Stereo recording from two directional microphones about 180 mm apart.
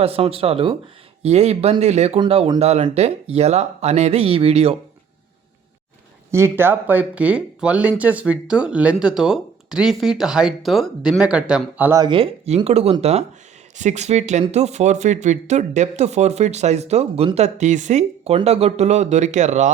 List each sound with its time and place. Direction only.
0.0 s speech: 35° right (ahead or behind)
6.3 s speech: 15° right (ahead or behind)
11.9 s speech: 30° right (ahead or behind)